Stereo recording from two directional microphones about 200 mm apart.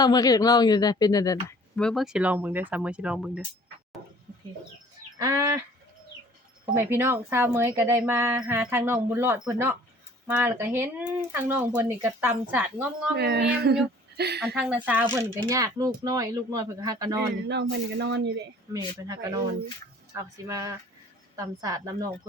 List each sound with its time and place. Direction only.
0.0 s speech: 20° left (ahead or behind)
1.7 s speech: 5° left (ahead or behind)
6.7 s speech: 10° right (ahead or behind)
13.1 s speech: 55° right (ahead or behind)
14.4 s speech: 5° right (ahead or behind)
15.1 s speech: 15° right (ahead or behind)
17.5 s speech: 55° right (ahead or behind)
18.7 s speech: 15° right (ahead or behind)